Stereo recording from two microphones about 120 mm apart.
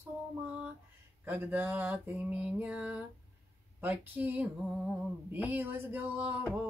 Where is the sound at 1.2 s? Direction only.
15° right (ahead or behind).